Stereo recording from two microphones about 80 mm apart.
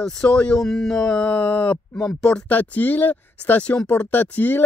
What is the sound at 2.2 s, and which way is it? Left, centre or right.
Speech, centre.